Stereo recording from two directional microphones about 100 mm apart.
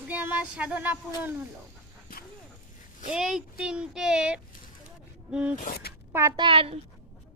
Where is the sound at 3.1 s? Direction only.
5° right (ahead or behind).